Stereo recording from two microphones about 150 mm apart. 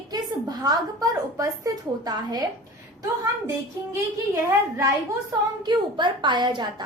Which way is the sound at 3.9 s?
20° right (ahead or behind).